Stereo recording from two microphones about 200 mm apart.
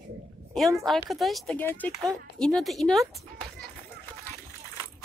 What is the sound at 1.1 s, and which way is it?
Speech, centre (ahead or behind).